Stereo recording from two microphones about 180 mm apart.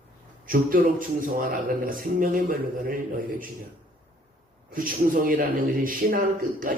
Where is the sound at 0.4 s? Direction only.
50° right (ahead or behind).